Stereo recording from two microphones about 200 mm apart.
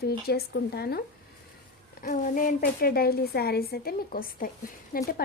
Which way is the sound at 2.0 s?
40° left (ahead or behind).